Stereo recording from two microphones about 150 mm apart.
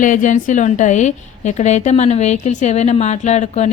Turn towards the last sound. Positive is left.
turn(degrees=45)  # may be behind; listen again after turning